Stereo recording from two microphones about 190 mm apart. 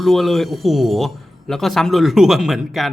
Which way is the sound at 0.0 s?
Centre (ahead or behind).